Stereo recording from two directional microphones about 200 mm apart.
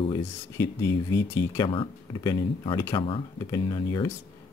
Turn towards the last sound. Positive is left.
turn(degrees=20)  # may be behind; listen again after turning